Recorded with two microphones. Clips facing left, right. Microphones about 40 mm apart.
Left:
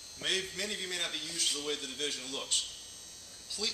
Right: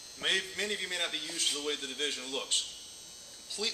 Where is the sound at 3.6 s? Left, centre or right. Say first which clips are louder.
Right 2 dB; centre.